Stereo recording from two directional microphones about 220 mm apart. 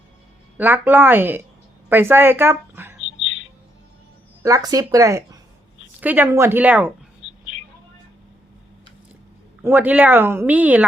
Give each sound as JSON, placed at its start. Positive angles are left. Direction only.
{"t": 0.5, "sound": "speech", "side_deg": -10}
{"t": 3.2, "sound": "music", "side_deg": 60}
{"t": 4.4, "sound": "speech", "side_deg": -15}
{"t": 7.2, "sound": "a sound", "side_deg": 55}
{"t": 9.6, "sound": "speech", "side_deg": -10}